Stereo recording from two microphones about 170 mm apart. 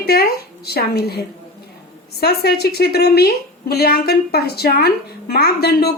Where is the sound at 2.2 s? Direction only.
65° left (ahead or behind).